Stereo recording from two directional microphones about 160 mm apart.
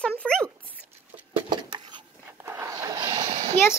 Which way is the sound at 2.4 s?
15° right (ahead or behind).